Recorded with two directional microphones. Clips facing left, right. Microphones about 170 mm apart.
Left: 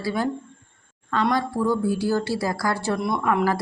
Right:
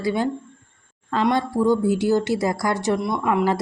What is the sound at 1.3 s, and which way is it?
Speech, 25° right (ahead or behind).